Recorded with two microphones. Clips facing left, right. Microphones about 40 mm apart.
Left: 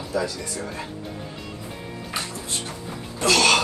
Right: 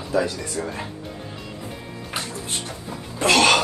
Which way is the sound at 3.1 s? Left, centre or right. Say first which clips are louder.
Right 2 dB; right.